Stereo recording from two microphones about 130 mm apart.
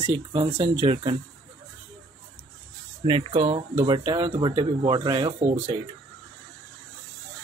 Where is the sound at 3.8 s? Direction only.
30° right (ahead or behind).